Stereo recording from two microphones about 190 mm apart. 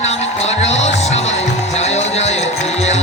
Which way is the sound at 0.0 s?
35° left (ahead or behind).